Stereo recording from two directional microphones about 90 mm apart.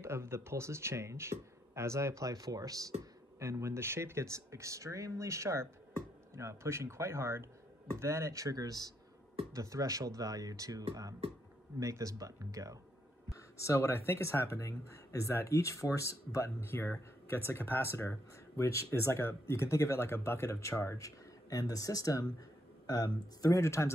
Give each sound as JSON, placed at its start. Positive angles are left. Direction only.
{"t": 0.0, "sound": "speech", "side_deg": -30}
{"t": 13.3, "sound": "speech", "side_deg": 35}
{"t": 23.4, "sound": "speech", "side_deg": 35}